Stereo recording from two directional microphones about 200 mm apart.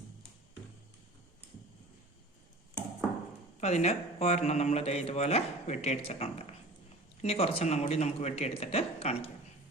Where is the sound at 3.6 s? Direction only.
35° left (ahead or behind).